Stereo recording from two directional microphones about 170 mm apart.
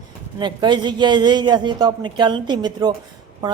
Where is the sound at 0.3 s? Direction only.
25° right (ahead or behind).